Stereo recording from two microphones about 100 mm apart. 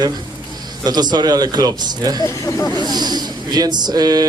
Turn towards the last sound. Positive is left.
turn(degrees=-40)  # may be behind; listen again after turning